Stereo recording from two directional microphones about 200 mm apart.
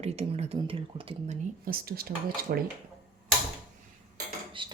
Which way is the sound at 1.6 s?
45° right (ahead or behind).